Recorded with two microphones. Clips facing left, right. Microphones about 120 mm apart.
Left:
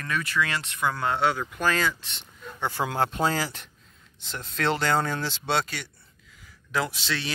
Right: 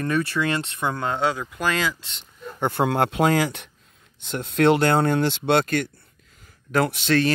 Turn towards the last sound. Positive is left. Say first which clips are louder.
# right 10 dB
turn(degrees=-50)  # may be behind; listen again after turning